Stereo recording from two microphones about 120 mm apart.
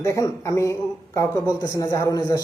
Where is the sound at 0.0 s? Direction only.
25° left (ahead or behind).